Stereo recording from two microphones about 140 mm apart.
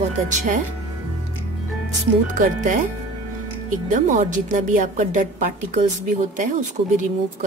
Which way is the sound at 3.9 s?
70° right (ahead or behind).